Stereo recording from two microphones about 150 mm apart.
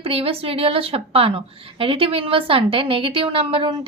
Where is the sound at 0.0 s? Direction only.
40° right (ahead or behind).